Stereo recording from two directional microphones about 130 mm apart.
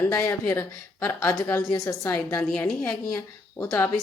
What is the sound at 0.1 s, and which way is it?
A woman's voice, 25° left (ahead or behind).